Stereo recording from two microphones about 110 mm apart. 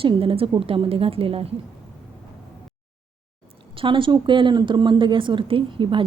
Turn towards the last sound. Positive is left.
turn(degrees=-50)  # may be behind; listen again after turning